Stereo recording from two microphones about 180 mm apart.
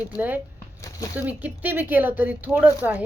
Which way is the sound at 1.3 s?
10° right (ahead or behind).